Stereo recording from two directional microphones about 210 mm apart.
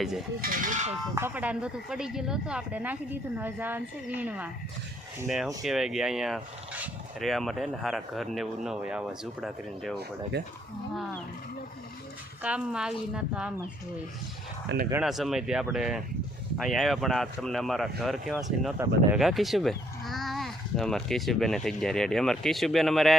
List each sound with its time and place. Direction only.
0.4 s speech: 40° right (ahead or behind)
1.1 s speech: 10° right (ahead or behind)
5.6 s speech: centre (ahead or behind)
10.3 s speech: 50° right (ahead or behind)
12.4 s speech: 5° right (ahead or behind)
14.7 s speech: 60° right (ahead or behind)
15.0 s speech: centre (ahead or behind)